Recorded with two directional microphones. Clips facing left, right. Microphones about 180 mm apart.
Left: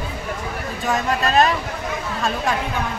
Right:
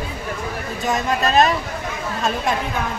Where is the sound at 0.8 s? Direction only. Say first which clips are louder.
Right 1 dB; 35° right (ahead or behind).